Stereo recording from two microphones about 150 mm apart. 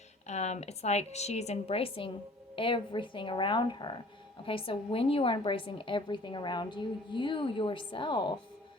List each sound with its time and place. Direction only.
0.3 s a woman's voice: 50° left (ahead or behind); by 8.4 s 30° left (ahead or behind)